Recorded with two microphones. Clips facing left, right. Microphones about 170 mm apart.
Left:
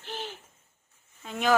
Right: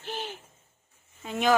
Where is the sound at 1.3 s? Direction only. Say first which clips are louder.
Right 1 dB; centre (ahead or behind).